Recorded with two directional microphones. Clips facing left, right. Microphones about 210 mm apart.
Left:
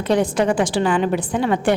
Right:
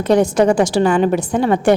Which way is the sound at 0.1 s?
40° right (ahead or behind).